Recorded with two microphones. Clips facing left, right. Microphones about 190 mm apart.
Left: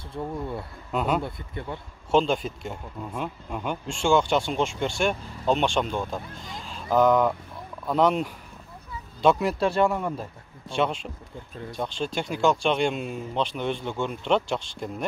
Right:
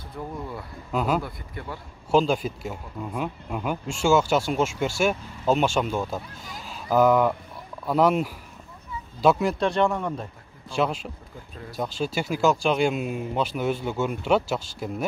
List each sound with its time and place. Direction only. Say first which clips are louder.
0.1 s speech: left 3 dB; 25° left (ahead or behind)
0.9 s speech: right 1 dB; centre (ahead or behind)
1.2 s speech: left 2 dB; 25° left (ahead or behind)
2.0 s speech: right 1 dB; centre (ahead or behind)